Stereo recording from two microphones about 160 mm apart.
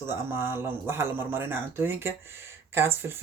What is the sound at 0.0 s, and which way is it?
Speech, 15° right (ahead or behind).